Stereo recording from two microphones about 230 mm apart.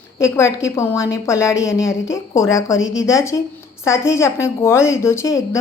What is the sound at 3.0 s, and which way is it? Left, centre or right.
A woman's voice, centre.